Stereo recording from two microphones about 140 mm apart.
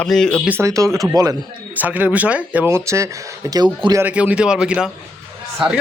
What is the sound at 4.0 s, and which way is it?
Speech, 10° right (ahead or behind).